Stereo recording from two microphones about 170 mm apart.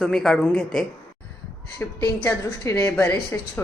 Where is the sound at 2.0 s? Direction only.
15° left (ahead or behind).